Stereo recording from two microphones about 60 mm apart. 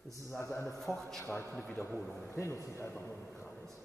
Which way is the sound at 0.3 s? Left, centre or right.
Left.